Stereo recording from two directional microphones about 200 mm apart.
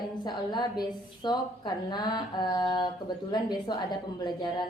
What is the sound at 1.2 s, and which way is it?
A woman's voice, 20° left (ahead or behind).